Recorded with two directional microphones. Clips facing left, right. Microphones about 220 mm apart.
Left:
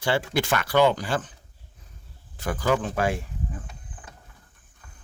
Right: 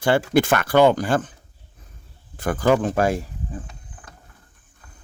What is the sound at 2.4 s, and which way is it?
Speech, 50° right (ahead or behind).